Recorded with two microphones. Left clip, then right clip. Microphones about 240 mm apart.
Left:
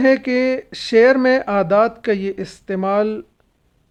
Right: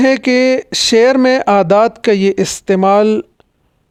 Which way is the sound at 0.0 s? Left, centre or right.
Right.